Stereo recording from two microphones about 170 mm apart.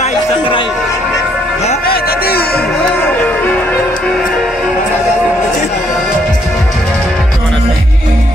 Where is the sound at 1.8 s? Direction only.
65° left (ahead or behind).